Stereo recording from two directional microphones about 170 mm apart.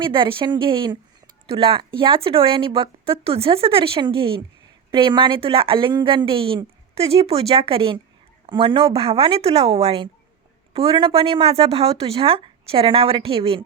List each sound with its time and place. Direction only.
0.0 s speech: 30° right (ahead or behind)